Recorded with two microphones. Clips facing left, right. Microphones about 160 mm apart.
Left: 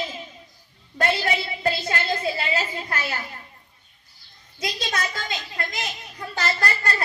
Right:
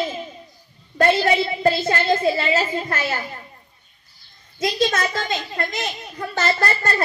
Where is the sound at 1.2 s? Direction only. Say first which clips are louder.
Right 7 dB; 45° right (ahead or behind).